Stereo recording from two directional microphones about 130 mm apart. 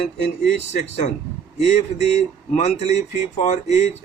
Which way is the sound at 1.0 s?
60° left (ahead or behind).